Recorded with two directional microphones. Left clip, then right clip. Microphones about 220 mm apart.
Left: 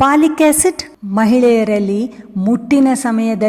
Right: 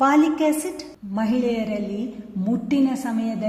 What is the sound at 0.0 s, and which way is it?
A woman's voice, 35° left (ahead or behind).